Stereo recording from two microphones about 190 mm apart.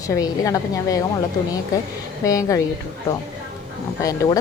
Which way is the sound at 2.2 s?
20° left (ahead or behind).